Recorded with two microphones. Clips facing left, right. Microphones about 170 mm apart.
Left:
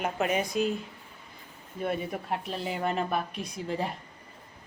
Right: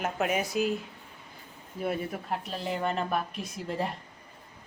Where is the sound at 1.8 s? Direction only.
Centre (ahead or behind).